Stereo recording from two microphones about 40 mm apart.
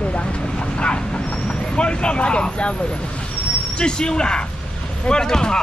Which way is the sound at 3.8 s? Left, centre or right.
Left.